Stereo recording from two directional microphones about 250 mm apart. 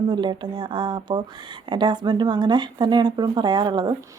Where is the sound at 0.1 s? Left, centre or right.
Centre.